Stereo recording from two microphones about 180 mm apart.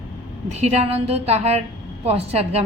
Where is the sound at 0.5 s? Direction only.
35° right (ahead or behind).